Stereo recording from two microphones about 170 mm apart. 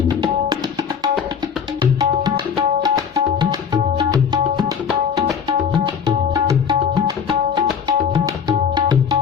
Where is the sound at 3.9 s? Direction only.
25° right (ahead or behind).